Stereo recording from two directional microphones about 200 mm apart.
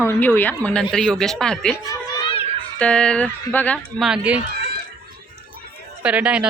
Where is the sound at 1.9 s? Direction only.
25° left (ahead or behind).